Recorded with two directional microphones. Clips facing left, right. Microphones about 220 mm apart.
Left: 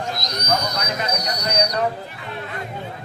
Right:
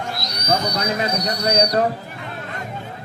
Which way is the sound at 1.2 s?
45° left (ahead or behind).